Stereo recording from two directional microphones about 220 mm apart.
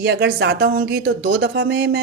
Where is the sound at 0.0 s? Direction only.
50° right (ahead or behind).